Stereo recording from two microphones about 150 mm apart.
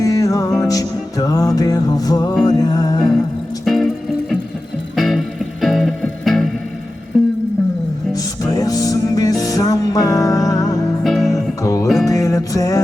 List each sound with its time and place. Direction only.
0.0 s music: 20° left (ahead or behind)
3.7 s music: centre (ahead or behind)
8.1 s music: 25° left (ahead or behind)
11.0 s music: centre (ahead or behind)
11.6 s music: 25° left (ahead or behind)